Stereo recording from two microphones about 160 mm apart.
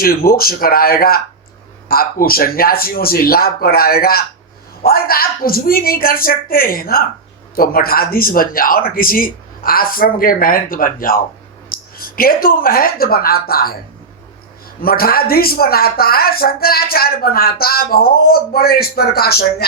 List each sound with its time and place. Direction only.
0.0 s a woman's voice: 65° left (ahead or behind)
14.8 s a woman's voice: 70° left (ahead or behind)